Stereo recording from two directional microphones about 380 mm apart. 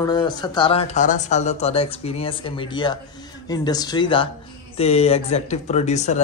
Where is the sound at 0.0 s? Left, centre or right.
Centre.